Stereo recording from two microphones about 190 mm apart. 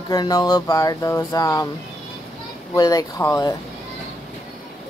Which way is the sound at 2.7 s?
20° left (ahead or behind).